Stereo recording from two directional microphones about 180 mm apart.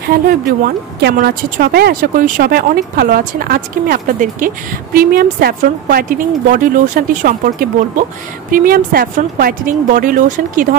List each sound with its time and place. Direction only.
0.1 s a woman's voice: 55° right (ahead or behind)